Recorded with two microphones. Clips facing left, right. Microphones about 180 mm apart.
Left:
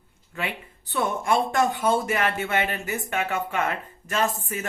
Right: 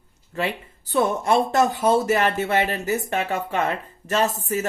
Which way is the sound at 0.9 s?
35° right (ahead or behind).